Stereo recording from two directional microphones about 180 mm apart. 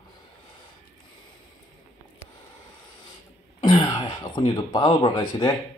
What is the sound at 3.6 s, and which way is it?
Throat clearing, 25° left (ahead or behind).